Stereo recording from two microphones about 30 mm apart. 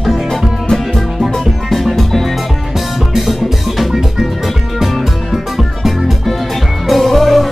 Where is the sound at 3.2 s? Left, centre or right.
Centre.